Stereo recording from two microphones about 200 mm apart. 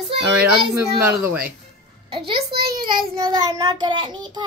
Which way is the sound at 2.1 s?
25° right (ahead or behind).